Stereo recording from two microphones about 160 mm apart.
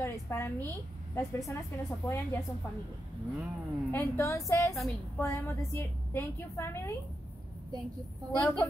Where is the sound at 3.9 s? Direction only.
15° left (ahead or behind).